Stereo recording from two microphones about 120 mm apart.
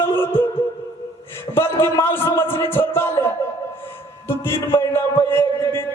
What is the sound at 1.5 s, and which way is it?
A man's voice, 20° left (ahead or behind).